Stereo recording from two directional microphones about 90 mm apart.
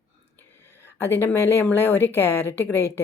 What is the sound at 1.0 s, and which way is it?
Speech, 25° left (ahead or behind).